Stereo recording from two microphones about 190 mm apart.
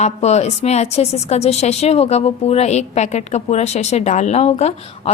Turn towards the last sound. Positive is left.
turn(degrees=35)  # may be behind; listen again after turning